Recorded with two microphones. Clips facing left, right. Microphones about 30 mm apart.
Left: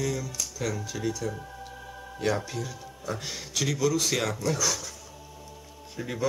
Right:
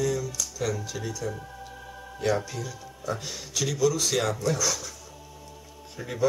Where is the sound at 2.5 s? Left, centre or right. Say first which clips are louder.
Left 1 dB; centre.